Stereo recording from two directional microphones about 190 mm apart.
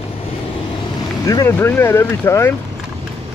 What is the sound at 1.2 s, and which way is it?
Speech, 15° left (ahead or behind).